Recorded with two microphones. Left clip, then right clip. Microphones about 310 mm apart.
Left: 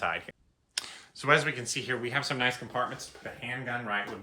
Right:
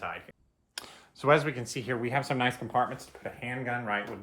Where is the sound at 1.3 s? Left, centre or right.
Centre.